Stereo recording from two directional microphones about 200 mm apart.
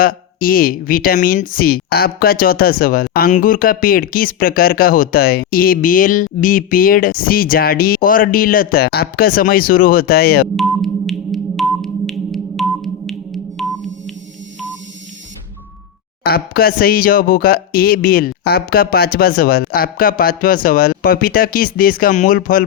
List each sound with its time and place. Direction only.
0.0 s a woman's voice: 45° left (ahead or behind)
10.6 s sonar: centre (ahead or behind)
16.2 s a woman's voice: 50° left (ahead or behind)